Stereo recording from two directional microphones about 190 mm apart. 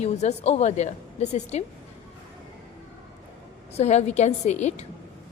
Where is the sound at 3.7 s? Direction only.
35° left (ahead or behind).